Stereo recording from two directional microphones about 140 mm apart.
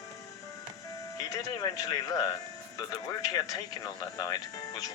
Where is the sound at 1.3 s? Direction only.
25° left (ahead or behind).